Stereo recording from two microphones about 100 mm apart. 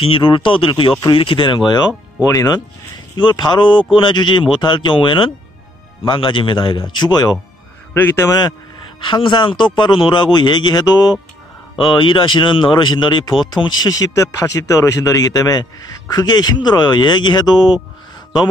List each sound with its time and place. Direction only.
0.0 s speech: 60° left (ahead or behind)
2.2 s speech: 40° left (ahead or behind)
3.2 s speech: 50° left (ahead or behind)
7.9 s a man's voice: 20° left (ahead or behind)
8.3 s speech: 40° left (ahead or behind)
9.0 s speech: 55° left (ahead or behind)
11.8 s speech: 55° left (ahead or behind)